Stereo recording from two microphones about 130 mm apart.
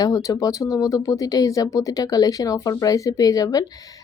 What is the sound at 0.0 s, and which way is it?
Speech, 25° left (ahead or behind).